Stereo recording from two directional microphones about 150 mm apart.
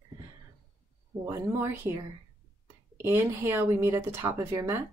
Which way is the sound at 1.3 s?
20° right (ahead or behind).